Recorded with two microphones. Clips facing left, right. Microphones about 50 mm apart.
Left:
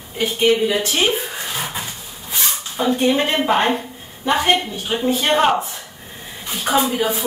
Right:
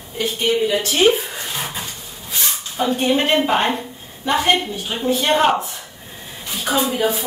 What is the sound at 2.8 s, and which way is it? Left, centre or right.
Speech, centre.